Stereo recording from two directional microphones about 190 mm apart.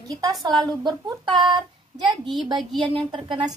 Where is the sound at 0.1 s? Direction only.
20° right (ahead or behind).